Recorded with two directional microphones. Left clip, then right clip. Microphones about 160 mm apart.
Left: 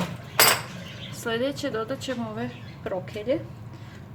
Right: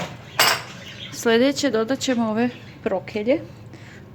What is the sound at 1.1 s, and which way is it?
A woman's voice, 55° right (ahead or behind).